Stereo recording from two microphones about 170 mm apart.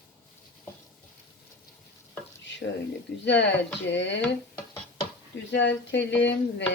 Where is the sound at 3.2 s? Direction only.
90° left.